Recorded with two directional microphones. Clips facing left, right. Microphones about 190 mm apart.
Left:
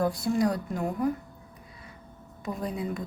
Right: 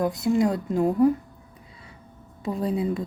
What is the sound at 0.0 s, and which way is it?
A woman's voice, 20° right (ahead or behind).